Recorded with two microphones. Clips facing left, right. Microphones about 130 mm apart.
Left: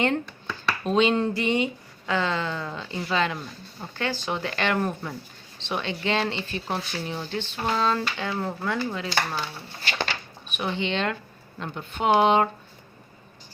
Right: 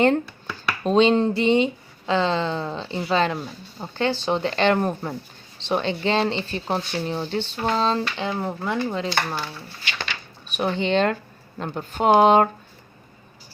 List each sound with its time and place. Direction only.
0.3 s finger snapping: 5° right (ahead or behind)
0.9 s speech: 30° right (ahead or behind)
10.5 s speech: 40° right (ahead or behind)